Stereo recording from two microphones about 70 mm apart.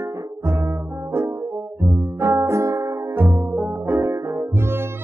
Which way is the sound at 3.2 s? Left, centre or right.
Right.